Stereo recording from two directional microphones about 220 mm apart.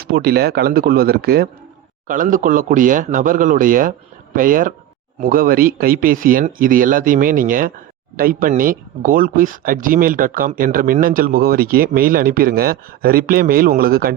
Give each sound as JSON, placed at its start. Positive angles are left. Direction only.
{"t": 0.0, "sound": "speech", "side_deg": -45}